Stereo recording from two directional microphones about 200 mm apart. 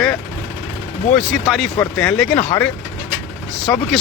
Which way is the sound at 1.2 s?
Centre (ahead or behind).